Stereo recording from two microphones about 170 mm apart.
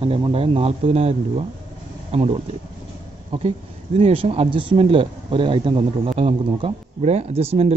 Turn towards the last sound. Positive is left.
turn(degrees=-35)  # may be behind; listen again after turning